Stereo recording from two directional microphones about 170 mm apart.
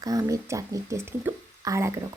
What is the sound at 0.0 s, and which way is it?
Speech, 20° right (ahead or behind).